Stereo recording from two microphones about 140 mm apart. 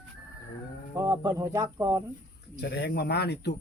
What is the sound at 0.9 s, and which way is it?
Speech, 20° right (ahead or behind).